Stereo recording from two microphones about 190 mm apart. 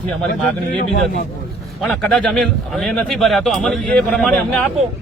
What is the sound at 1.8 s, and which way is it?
A man's voice, 5° left (ahead or behind).